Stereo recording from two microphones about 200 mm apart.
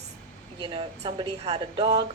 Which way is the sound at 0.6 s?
25° right (ahead or behind).